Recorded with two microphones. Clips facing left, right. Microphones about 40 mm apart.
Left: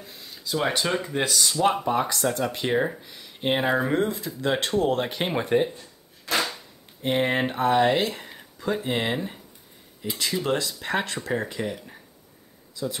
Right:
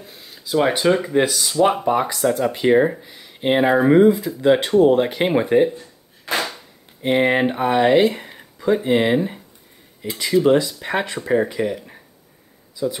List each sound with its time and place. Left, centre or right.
0.0 s speech: centre
7.0 s speech: centre